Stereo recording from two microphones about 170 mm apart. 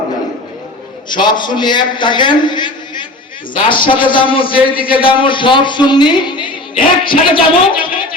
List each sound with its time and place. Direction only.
1.1 s a man's voice: 25° left (ahead or behind)